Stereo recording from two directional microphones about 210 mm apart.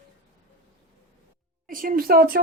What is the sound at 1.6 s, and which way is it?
Music, 40° right (ahead or behind).